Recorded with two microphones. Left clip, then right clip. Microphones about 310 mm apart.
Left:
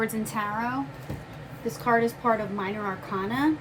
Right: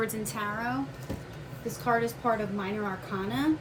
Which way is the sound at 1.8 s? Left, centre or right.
Left.